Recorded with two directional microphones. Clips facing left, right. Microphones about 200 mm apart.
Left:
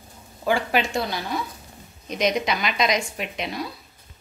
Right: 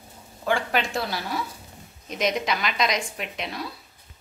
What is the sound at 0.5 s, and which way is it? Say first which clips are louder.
A woman's voice: left 2 dB; 5° left (ahead or behind).